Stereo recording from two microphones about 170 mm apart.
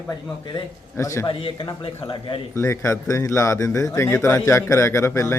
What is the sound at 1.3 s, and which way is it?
Speech, 30° left (ahead or behind).